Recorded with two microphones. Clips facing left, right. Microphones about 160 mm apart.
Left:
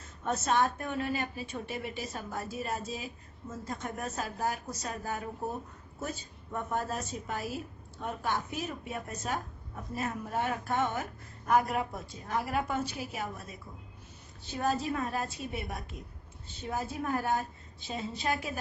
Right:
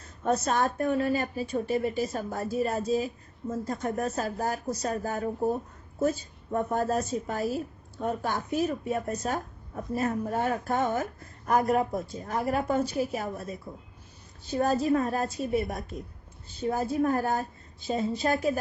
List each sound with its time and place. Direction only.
0.0 s a woman's voice: 35° right (ahead or behind)